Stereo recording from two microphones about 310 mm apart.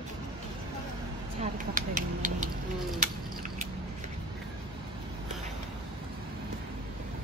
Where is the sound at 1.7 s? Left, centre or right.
Right.